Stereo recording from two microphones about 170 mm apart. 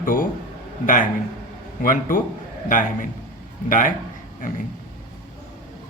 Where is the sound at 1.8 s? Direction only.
50° left (ahead or behind).